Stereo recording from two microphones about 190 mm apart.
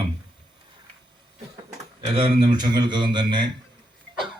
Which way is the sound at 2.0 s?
25° right (ahead or behind).